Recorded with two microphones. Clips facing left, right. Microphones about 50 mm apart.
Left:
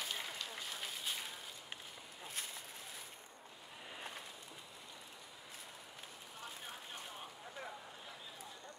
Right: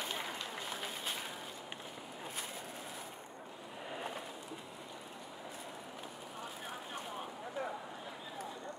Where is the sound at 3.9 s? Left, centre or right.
Centre.